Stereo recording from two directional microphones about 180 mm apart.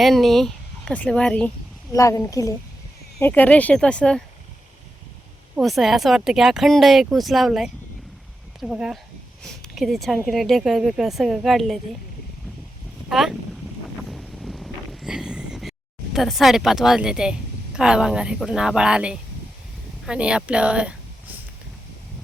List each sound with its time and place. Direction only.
0.0 s speech: centre (ahead or behind)
1.9 s a woman's voice: 20° left (ahead or behind)
5.5 s speech: centre (ahead or behind)
13.1 s speech: centre (ahead or behind)
14.1 s wind noise: centre (ahead or behind)
16.1 s speech: centre (ahead or behind)